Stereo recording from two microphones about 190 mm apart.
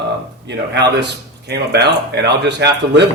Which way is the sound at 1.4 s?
60° right (ahead or behind).